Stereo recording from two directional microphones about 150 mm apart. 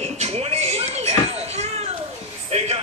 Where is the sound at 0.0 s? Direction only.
45° right (ahead or behind).